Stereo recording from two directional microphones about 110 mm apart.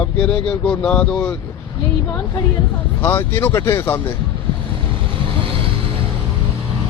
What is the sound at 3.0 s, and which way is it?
Speech, 15° left (ahead or behind).